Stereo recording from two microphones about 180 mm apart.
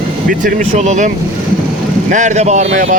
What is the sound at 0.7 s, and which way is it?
Speech, 40° right (ahead or behind).